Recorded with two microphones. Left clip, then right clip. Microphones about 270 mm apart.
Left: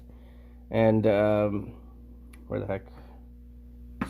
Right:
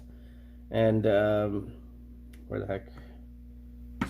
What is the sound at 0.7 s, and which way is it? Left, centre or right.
Speech, left.